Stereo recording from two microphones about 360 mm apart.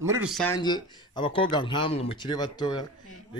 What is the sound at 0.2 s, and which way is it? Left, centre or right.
Speech, centre.